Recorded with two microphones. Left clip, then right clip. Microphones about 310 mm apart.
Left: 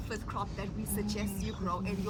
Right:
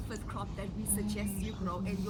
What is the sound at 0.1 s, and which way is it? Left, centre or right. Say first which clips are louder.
A woman's voice: left 5 dB; centre.